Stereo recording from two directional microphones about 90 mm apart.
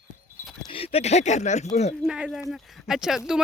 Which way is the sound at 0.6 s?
90° left.